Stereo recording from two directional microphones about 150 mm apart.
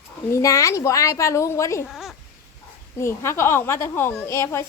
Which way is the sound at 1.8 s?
Centre (ahead or behind).